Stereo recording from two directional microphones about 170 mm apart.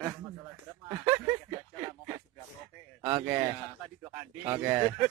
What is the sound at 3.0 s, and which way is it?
Speech, 25° right (ahead or behind).